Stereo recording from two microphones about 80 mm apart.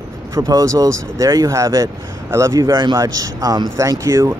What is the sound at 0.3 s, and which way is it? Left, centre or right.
Speech, right.